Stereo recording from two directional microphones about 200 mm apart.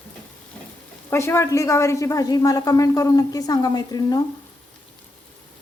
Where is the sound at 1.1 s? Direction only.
10° left (ahead or behind).